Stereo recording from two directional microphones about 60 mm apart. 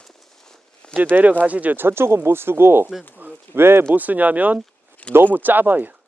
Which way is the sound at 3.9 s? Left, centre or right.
Right.